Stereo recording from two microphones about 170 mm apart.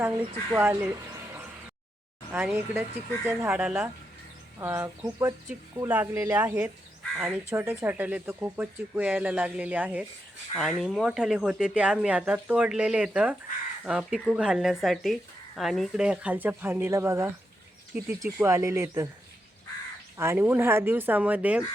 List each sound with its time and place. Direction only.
0.5 s speech: 15° right (ahead or behind)
20.1 s speech: 15° right (ahead or behind)